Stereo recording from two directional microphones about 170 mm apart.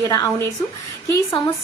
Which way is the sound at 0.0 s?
20° left (ahead or behind).